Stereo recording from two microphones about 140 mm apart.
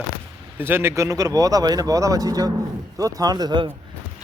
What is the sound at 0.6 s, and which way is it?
Speech, 15° right (ahead or behind).